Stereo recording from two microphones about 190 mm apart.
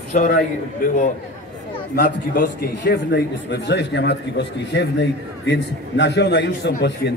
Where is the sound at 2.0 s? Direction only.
50° left (ahead or behind).